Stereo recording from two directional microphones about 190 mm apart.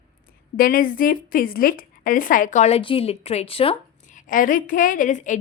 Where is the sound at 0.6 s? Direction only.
50° left (ahead or behind); by 3.7 s 30° left (ahead or behind).